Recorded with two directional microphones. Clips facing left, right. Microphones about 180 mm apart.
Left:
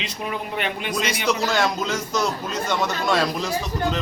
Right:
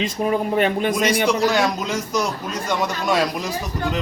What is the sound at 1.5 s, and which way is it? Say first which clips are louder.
A man's voice: right 2 dB; 15° right (ahead or behind).